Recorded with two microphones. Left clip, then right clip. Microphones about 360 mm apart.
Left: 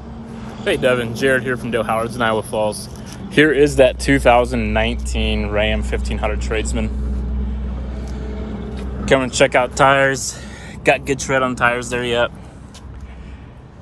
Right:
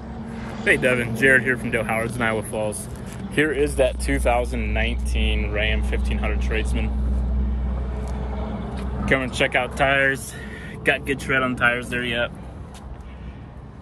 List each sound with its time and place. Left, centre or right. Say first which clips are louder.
0.4 s vehicle: even; right
0.7 s speech: left 2 dB; centre
9.0 s speech: left 7 dB; centre
9.8 s speech: left 5 dB; left
11.2 s speech: left 4 dB; left
11.9 s speech: left 6 dB; centre